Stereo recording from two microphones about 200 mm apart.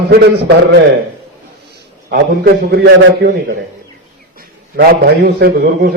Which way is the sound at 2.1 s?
50° right (ahead or behind).